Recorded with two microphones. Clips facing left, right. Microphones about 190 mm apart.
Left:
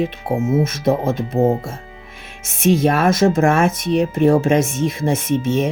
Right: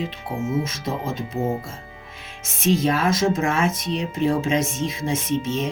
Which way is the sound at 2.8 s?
55° left (ahead or behind).